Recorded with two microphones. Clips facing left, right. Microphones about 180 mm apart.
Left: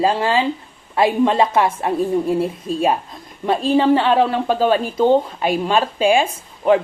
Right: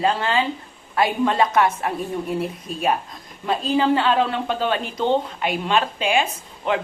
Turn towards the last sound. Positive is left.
turn(degrees=35)  # may be behind; listen again after turning